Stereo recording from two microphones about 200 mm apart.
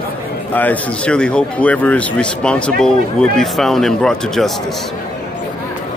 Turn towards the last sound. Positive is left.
turn(degrees=0)  # may be behind; listen again after turning